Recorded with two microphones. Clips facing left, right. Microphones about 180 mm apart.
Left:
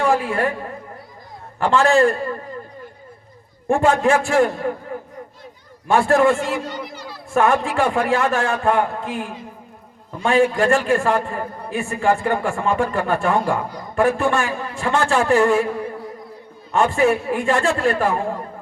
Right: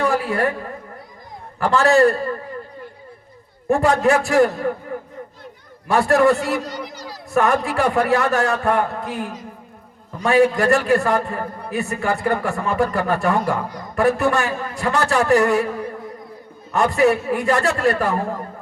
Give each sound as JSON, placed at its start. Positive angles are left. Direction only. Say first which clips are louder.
{"t": 0.0, "sound": "a sound", "louder": "left 1 dB", "side_deg": -40}
{"t": 1.6, "sound": "a man's voice", "louder": "right 1 dB", "side_deg": -40}
{"t": 3.7, "sound": "a man's voice", "louder": "even", "side_deg": -40}
{"t": 5.9, "sound": "a man's voice", "louder": "even", "side_deg": -40}
{"t": 16.7, "sound": "a man's voice", "louder": "even", "side_deg": -40}